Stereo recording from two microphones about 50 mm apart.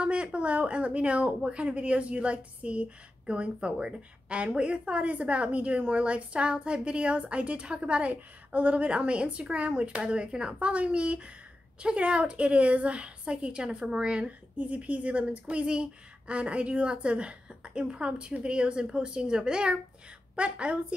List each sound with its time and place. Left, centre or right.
0.0 s speech: right